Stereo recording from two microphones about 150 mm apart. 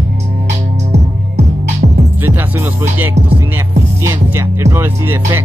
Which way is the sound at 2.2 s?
15° right (ahead or behind).